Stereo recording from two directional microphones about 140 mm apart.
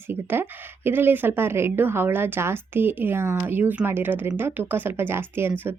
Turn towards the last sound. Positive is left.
turn(degrees=-15)  # may be behind; listen again after turning